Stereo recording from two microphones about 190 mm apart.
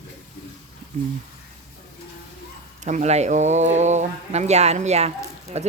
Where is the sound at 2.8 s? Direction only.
40° right (ahead or behind).